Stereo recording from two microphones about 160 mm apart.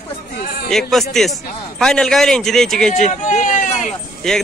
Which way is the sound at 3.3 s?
50° left (ahead or behind).